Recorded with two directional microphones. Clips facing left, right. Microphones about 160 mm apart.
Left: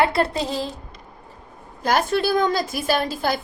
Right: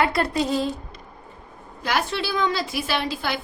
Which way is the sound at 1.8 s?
45° left (ahead or behind).